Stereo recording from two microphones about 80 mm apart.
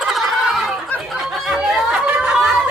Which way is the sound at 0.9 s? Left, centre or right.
Left.